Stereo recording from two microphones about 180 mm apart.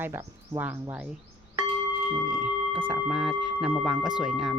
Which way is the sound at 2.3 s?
5° right (ahead or behind).